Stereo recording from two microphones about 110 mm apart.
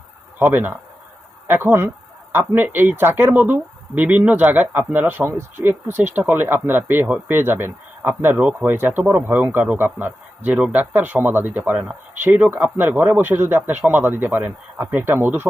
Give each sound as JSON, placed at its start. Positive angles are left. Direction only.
{"t": 0.3, "sound": "a man's voice", "side_deg": -15}